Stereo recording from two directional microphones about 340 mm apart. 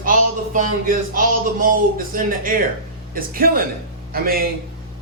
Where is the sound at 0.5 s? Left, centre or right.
Right.